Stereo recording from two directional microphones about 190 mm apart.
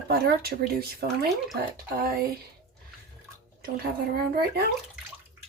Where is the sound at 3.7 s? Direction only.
55° right (ahead or behind).